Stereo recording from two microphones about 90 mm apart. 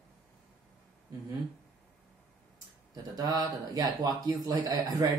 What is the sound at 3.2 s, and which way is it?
Speech, 45° right (ahead or behind).